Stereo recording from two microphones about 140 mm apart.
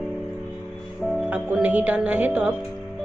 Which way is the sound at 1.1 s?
5° right (ahead or behind).